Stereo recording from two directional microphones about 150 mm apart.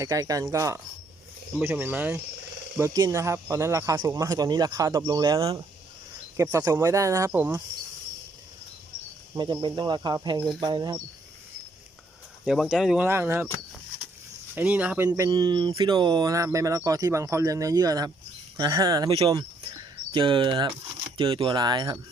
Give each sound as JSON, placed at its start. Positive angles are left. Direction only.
{"t": 0.0, "sound": "speech", "side_deg": -25}
{"t": 2.7, "sound": "speech", "side_deg": -20}
{"t": 9.3, "sound": "speech", "side_deg": -30}
{"t": 12.5, "sound": "speech", "side_deg": 0}
{"t": 13.1, "sound": "speech", "side_deg": -15}
{"t": 14.5, "sound": "speech", "side_deg": -10}
{"t": 15.3, "sound": "speech", "side_deg": -30}
{"t": 19.3, "sound": "cricket", "side_deg": -25}
{"t": 21.2, "sound": "speech", "side_deg": -35}